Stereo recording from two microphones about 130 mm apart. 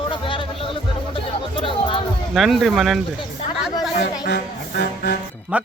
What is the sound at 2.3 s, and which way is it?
Speech, centre (ahead or behind).